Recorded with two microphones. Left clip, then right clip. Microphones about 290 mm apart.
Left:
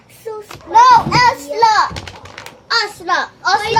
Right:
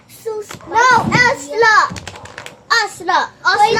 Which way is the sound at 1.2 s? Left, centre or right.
Centre.